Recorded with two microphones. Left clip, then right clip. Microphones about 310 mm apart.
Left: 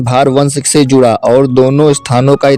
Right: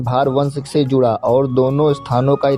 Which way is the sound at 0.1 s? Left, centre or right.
Left.